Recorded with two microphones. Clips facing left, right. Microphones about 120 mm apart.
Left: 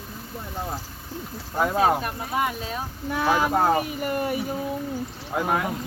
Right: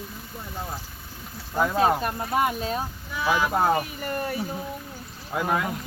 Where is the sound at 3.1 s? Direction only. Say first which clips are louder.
Left 3 dB; 50° left (ahead or behind).